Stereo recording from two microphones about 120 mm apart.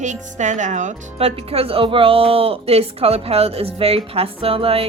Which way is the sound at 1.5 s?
55° right (ahead or behind).